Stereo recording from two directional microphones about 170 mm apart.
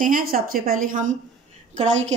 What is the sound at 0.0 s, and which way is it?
A woman's voice, 55° right (ahead or behind).